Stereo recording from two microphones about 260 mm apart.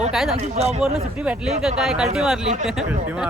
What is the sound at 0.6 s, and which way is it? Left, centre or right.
Speech, right.